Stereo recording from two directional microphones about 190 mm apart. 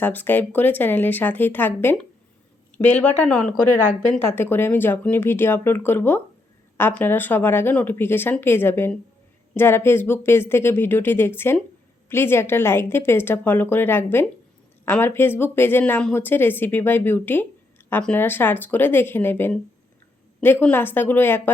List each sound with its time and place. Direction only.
0.0 s a woman's voice: 10° left (ahead or behind)